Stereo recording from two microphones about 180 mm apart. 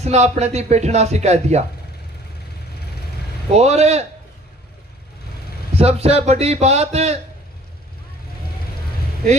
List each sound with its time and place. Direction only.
0.0 s a man's voice: 40° right (ahead or behind)
3.5 s a man's voice: 35° right (ahead or behind)
5.8 s a man's voice: 35° right (ahead or behind)